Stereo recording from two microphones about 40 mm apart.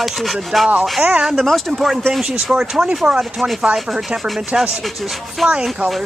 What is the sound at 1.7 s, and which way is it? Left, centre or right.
Speech, centre.